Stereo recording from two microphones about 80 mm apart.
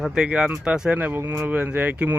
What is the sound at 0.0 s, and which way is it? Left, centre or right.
A man's voice, centre.